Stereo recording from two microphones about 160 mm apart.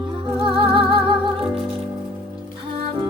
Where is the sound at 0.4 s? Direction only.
35° right (ahead or behind).